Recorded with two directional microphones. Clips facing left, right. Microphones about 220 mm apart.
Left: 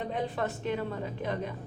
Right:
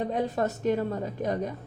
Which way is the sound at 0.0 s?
40° right (ahead or behind).